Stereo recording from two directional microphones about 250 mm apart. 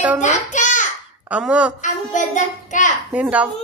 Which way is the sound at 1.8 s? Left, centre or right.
Left.